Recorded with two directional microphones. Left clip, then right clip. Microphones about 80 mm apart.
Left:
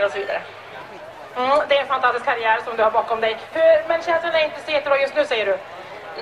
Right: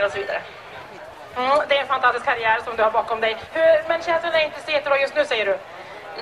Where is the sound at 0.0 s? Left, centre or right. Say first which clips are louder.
Left 1 dB; right.